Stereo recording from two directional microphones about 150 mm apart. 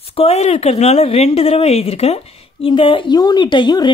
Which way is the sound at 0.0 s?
40° left (ahead or behind).